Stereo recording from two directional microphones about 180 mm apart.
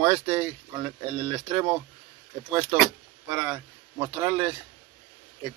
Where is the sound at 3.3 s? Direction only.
20° right (ahead or behind).